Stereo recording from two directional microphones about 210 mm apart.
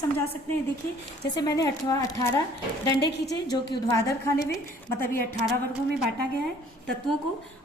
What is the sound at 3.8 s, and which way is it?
Speech, 15° left (ahead or behind).